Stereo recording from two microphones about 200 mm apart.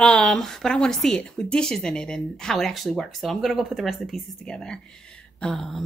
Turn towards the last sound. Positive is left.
turn(degrees=0)  # may be behind; listen again after turning